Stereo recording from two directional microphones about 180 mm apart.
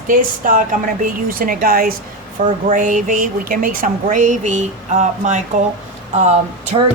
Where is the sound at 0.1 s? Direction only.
50° right (ahead or behind).